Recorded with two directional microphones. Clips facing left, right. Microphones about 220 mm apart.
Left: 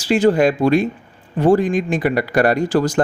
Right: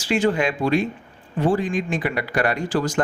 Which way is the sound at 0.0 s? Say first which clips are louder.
Left 6 dB; 40° left (ahead or behind).